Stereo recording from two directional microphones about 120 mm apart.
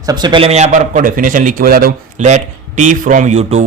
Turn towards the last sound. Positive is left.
turn(degrees=-75)  # may be behind; listen again after turning